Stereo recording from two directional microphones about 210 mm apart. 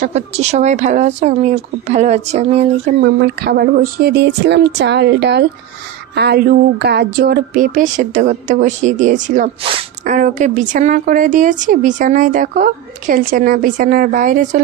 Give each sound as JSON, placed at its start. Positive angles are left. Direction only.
{"t": 0.0, "sound": "speech", "side_deg": -30}
{"t": 3.0, "sound": "speech", "side_deg": -50}
{"t": 9.6, "sound": "speech", "side_deg": -25}
{"t": 10.0, "sound": "speech", "side_deg": -35}